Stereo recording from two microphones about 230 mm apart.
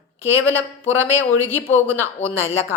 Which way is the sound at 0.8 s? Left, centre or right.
Left.